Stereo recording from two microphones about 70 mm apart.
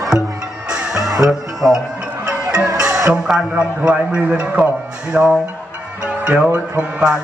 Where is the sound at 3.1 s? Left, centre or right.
Centre.